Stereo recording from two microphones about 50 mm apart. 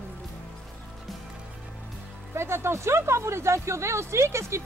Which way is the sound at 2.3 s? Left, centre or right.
Right.